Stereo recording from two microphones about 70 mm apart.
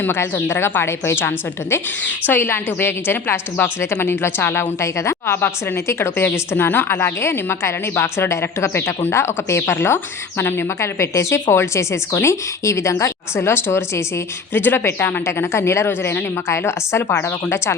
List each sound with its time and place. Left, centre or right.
0.0 s a woman's voice: left